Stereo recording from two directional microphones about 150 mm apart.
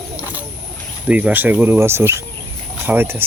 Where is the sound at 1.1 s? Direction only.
10° right (ahead or behind).